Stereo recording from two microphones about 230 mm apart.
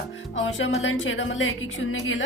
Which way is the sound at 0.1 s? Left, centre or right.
Left.